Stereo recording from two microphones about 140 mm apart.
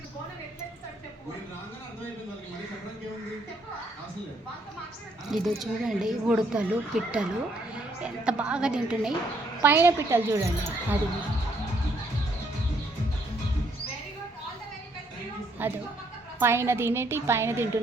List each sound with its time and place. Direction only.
5.3 s a woman's voice: centre (ahead or behind); by 10.9 s 20° right (ahead or behind)
15.6 s a woman's voice: 15° right (ahead or behind)